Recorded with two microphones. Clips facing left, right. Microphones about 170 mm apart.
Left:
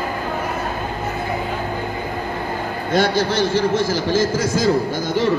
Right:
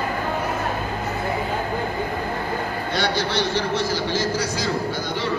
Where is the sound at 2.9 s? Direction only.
45° left (ahead or behind).